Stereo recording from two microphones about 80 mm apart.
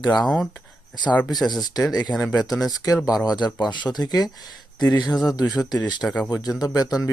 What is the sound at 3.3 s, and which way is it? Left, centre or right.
Speech, left.